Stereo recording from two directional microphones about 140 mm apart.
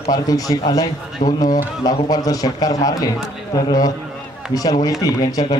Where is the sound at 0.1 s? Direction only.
25° left (ahead or behind).